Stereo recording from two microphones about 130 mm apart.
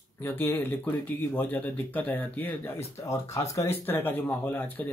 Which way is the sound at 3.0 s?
25° left (ahead or behind).